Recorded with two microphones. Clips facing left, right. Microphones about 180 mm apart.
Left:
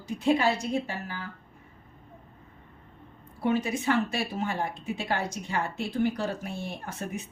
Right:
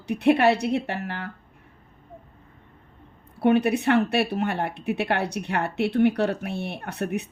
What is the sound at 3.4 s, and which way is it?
A woman's voice, 65° right (ahead or behind).